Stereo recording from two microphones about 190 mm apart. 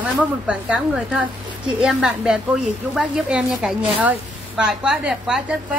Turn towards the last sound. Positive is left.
turn(degrees=-5)  # may be behind; listen again after turning